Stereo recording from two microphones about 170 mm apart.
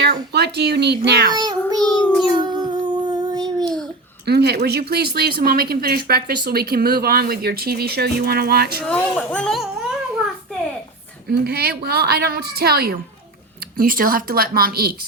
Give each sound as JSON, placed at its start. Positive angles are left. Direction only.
{"t": 0.0, "sound": "a child's voice", "side_deg": -75}
{"t": 1.3, "sound": "a sound", "side_deg": -25}
{"t": 4.3, "sound": "speech", "side_deg": -70}
{"t": 8.9, "sound": "speech", "side_deg": 5}
{"t": 11.3, "sound": "speech", "side_deg": -65}